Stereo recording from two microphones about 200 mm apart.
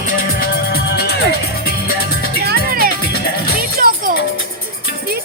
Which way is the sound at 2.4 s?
50° right (ahead or behind).